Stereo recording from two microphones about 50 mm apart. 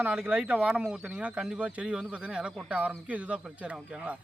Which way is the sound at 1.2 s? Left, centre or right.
Right.